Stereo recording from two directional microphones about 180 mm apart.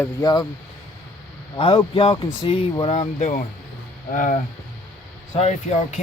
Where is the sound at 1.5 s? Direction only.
30° left (ahead or behind).